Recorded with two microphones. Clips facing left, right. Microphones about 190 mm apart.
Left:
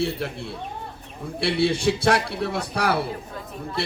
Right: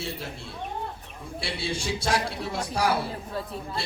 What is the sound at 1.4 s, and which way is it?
A man's voice, 65° left (ahead or behind).